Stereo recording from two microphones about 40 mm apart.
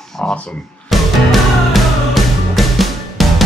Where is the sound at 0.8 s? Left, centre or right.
Centre.